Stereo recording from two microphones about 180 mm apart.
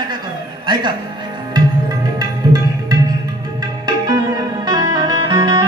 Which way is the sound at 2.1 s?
20° right (ahead or behind).